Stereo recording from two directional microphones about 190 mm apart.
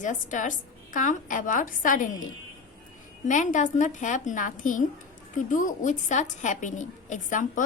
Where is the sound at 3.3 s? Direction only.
40° left (ahead or behind).